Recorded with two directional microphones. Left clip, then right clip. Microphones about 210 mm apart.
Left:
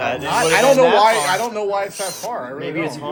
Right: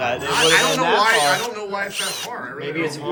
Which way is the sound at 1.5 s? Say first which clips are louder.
Left 5 dB; 20° left (ahead or behind).